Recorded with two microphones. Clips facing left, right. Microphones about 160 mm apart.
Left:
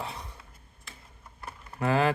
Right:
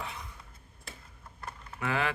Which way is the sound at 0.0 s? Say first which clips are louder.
Left 3 dB; 35° left (ahead or behind).